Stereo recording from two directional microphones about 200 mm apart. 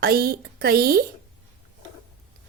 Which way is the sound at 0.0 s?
50° right (ahead or behind).